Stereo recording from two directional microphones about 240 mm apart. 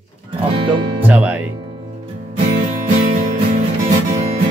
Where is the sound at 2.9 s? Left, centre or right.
Right.